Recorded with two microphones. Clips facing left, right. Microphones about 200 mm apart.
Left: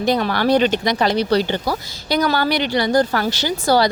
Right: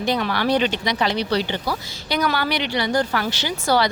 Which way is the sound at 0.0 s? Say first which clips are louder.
Left 4 dB; 40° left (ahead or behind).